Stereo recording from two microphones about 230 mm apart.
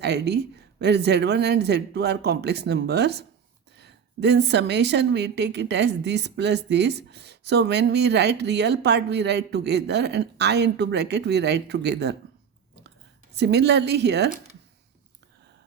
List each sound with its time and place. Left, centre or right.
0.0 s a woman's voice: right
13.3 s a woman's voice: right